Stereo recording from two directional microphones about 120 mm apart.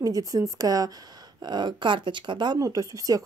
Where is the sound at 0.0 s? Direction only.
30° right (ahead or behind).